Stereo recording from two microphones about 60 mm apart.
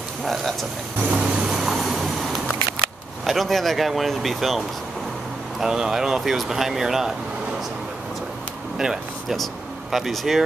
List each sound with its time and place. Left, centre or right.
0.2 s speech: centre
1.1 s vehicle: centre
1.5 s a sound: centre
3.3 s speech: centre
8.7 s speech: centre